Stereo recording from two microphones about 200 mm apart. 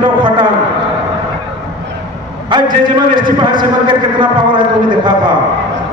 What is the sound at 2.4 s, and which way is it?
A man's voice, 25° right (ahead or behind).